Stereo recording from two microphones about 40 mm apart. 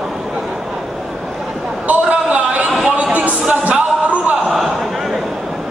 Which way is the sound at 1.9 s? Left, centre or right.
Right.